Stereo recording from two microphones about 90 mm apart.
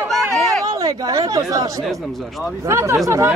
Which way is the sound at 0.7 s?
40° right (ahead or behind).